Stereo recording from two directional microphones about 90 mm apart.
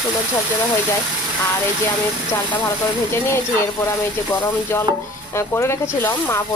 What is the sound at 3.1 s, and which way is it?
Speech, 30° left (ahead or behind).